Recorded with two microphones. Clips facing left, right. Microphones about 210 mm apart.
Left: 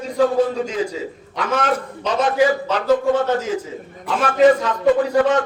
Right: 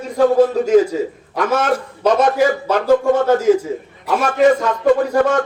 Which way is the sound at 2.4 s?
50° right (ahead or behind).